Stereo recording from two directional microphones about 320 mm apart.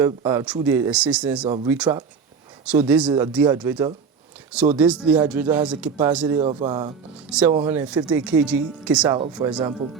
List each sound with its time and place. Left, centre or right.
0.0 s speech: centre
9.4 s speech: right